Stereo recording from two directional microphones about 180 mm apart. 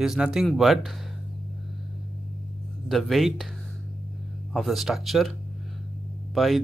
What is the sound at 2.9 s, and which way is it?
Speech, centre (ahead or behind).